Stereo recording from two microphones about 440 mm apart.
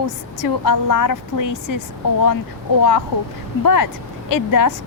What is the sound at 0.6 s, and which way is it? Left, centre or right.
A woman's voice, left.